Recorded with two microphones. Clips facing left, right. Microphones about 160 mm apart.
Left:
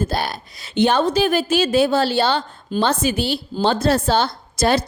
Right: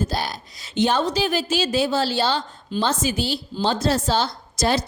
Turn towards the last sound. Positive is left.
turn(degrees=60)  # may be behind; listen again after turning